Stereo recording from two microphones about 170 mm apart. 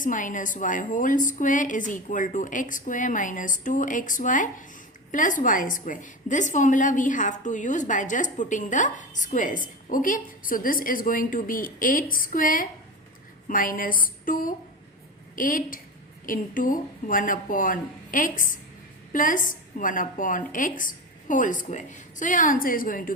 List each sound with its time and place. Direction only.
0.0 s a woman's voice: 50° left (ahead or behind)